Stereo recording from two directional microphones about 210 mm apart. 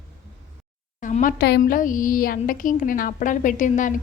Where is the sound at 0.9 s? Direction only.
40° left (ahead or behind).